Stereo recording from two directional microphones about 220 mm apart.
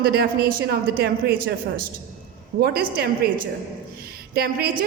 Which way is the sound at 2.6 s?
45° right (ahead or behind).